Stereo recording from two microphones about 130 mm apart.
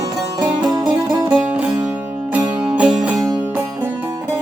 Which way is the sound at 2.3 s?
10° right (ahead or behind).